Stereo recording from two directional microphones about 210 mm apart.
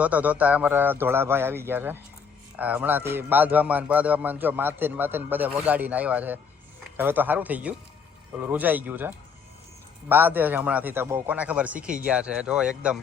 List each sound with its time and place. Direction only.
0.0 s a man's voice: 5° right (ahead or behind)